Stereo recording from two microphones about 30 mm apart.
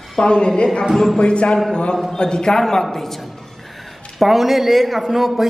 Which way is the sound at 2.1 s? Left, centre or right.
Left.